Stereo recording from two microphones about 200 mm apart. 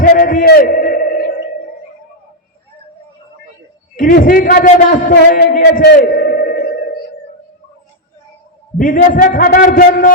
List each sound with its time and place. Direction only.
0.0 s a sound: 45° left (ahead or behind)
3.9 s a man's voice: 45° left (ahead or behind)
8.8 s a man's voice: 40° left (ahead or behind)